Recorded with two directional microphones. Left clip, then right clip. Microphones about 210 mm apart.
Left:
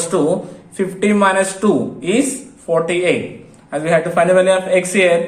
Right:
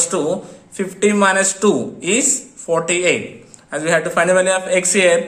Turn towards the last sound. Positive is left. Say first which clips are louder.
# left 1 dB
turn(degrees=-20)  # may be behind; listen again after turning